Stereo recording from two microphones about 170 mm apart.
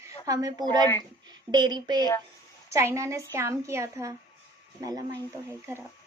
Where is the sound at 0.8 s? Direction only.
25° left (ahead or behind).